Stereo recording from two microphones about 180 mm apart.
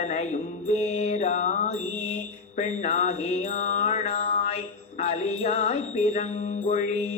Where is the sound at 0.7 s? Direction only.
40° left (ahead or behind).